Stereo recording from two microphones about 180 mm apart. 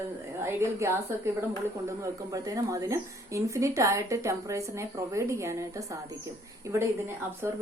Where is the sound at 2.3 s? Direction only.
20° right (ahead or behind).